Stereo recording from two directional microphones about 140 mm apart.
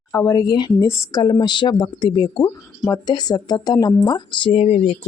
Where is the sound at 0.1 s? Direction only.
25° left (ahead or behind).